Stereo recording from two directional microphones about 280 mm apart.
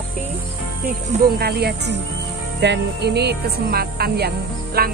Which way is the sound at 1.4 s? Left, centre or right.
Right.